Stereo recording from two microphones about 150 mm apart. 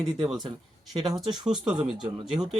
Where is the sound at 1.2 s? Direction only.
30° right (ahead or behind).